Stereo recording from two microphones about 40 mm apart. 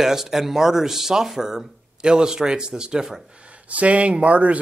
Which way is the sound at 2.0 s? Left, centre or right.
Right.